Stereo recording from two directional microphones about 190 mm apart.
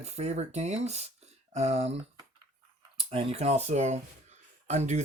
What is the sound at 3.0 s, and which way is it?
Speech, 30° right (ahead or behind).